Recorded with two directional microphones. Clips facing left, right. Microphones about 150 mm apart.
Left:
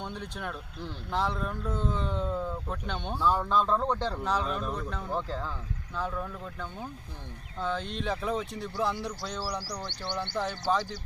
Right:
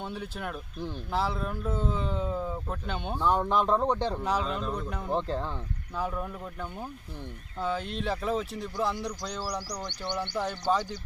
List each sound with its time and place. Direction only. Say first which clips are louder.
0.0 s speech: right 1 dB; 5° right (ahead or behind)
3.2 s speech: right 1 dB; 20° right (ahead or behind)
4.6 s speech: right 1 dB; centre (ahead or behind)
4.9 s speech: right 3 dB; 15° right (ahead or behind)
6.0 s speech: right 1 dB; 10° right (ahead or behind)
9.6 s speech: right 1 dB; 15° right (ahead or behind)
10.3 s speech: right 1 dB; 5° right (ahead or behind)